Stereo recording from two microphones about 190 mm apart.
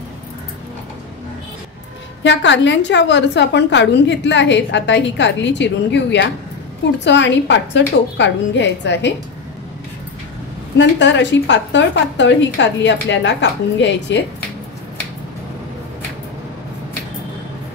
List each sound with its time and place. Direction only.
2.2 s a woman's voice: 70° left (ahead or behind)
10.8 s a woman's voice: 70° left (ahead or behind)